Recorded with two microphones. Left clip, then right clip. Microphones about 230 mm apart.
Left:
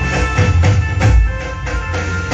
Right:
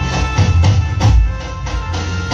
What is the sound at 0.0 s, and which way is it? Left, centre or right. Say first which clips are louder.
Music: left 2 dB; right.